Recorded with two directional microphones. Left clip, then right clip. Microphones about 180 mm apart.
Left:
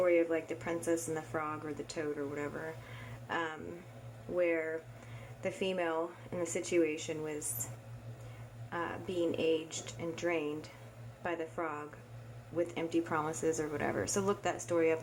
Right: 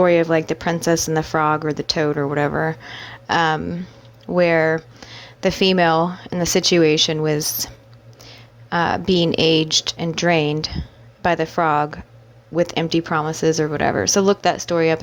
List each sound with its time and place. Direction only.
0.0 s speech: 50° right (ahead or behind)
8.7 s speech: 45° right (ahead or behind)